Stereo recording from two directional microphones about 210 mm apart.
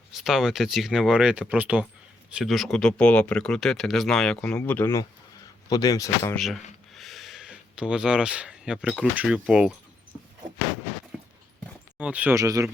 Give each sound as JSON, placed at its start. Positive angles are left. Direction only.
{"t": 0.1, "sound": "speech", "side_deg": 0}
{"t": 6.3, "sound": "speech", "side_deg": 0}
{"t": 11.1, "sound": "a sound", "side_deg": -5}
{"t": 11.9, "sound": "speech", "side_deg": -5}